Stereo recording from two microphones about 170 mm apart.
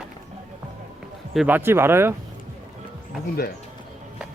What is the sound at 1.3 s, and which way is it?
Speech, 10° right (ahead or behind).